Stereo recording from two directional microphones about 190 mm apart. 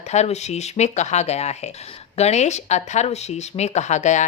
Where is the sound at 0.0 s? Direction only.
35° left (ahead or behind).